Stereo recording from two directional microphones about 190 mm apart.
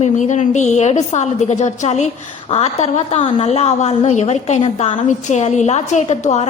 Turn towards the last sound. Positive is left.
turn(degrees=35)  # may be behind; listen again after turning